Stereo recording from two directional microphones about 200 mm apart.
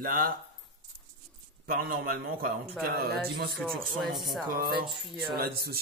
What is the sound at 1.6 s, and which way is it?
Speech, 50° right (ahead or behind).